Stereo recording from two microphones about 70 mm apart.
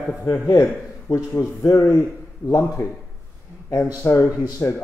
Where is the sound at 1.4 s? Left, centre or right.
Left.